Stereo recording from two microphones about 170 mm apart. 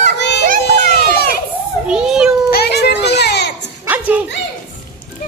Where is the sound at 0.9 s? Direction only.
70° left (ahead or behind).